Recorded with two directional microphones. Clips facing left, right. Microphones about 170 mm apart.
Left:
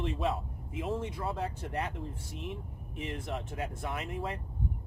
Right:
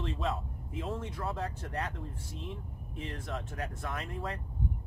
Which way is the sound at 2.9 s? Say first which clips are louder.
Left 2 dB; 15° left (ahead or behind).